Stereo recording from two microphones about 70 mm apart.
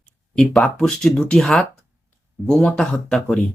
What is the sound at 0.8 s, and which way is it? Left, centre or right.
Speech, centre.